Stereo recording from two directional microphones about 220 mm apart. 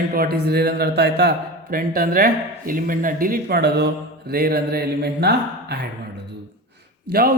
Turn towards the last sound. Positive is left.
turn(degrees=-45)  # may be behind; listen again after turning